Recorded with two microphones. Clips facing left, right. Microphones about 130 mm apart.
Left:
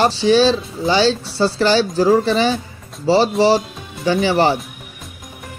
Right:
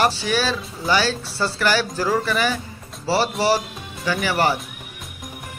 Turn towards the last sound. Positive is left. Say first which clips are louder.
# left 5 dB
turn(degrees=25)  # may be behind; listen again after turning